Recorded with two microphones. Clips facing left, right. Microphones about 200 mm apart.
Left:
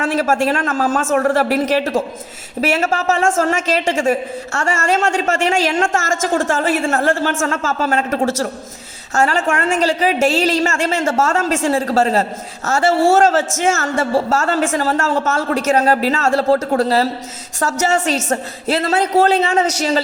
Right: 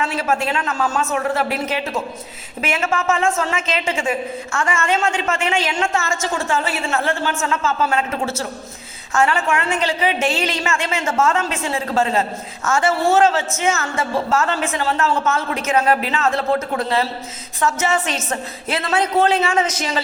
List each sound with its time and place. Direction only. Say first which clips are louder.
0.0 s a woman's voice: left 5 dB; 45° left (ahead or behind)